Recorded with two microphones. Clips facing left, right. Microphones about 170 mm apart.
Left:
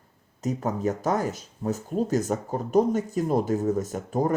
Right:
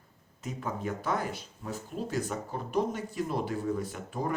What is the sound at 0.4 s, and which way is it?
Speech, 40° left (ahead or behind).